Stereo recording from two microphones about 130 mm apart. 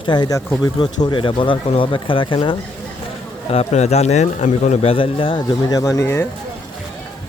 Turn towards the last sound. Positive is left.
turn(degrees=20)  # may be behind; listen again after turning